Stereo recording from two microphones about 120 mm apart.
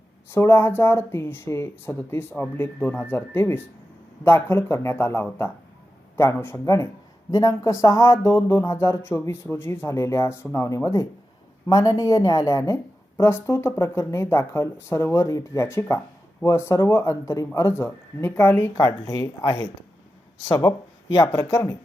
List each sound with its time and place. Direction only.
0.3 s a woman's voice: 20° left (ahead or behind)
18.8 s a woman's voice: 35° left (ahead or behind)